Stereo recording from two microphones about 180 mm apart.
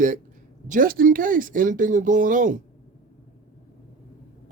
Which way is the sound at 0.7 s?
50° right (ahead or behind).